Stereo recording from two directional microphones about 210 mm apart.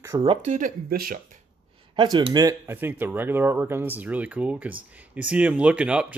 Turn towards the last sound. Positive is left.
turn(degrees=-5)  # may be behind; listen again after turning